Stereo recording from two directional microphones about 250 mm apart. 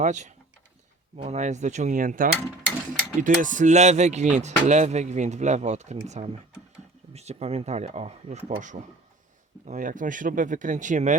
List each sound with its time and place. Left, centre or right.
0.0 s speech: right